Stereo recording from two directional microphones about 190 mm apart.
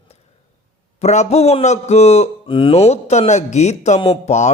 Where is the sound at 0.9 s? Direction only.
35° left (ahead or behind).